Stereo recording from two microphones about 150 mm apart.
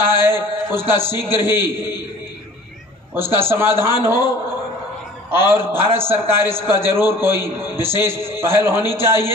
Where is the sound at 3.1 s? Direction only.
15° right (ahead or behind).